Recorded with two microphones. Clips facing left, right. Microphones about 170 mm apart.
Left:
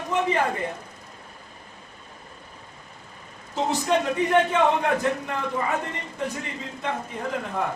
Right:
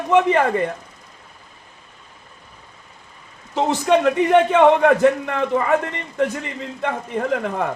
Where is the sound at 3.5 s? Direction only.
70° right (ahead or behind).